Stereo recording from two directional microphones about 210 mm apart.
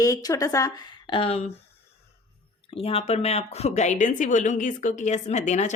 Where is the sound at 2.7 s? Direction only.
25° left (ahead or behind).